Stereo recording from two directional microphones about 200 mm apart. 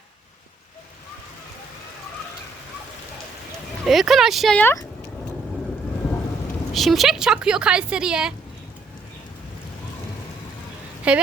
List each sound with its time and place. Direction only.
3.8 s a woman's voice: centre (ahead or behind)
6.7 s a woman's voice: centre (ahead or behind)
11.1 s a woman's voice: 5° right (ahead or behind)